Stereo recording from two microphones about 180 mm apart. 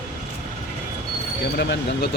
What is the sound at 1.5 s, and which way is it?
Speech, 70° left (ahead or behind).